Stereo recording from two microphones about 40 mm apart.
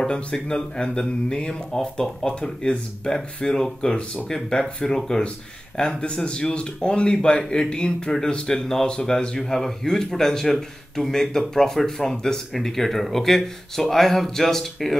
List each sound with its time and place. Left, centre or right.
0.1 s a man's voice: centre